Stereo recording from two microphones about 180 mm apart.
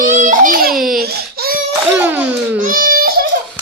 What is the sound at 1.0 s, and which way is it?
Baby cry, 60° right (ahead or behind).